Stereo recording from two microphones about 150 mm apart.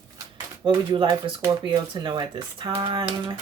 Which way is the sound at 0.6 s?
30° right (ahead or behind).